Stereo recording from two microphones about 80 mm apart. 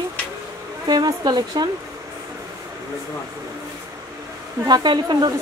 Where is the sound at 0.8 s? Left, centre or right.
Right.